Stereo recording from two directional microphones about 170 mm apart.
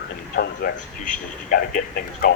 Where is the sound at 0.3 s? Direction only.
65° left (ahead or behind).